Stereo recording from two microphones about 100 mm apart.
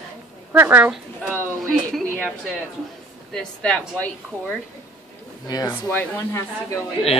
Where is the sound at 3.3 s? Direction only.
5° left (ahead or behind).